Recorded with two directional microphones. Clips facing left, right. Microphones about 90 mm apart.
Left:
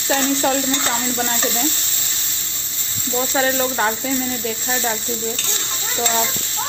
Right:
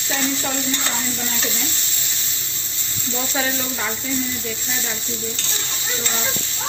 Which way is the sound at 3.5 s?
50° left (ahead or behind).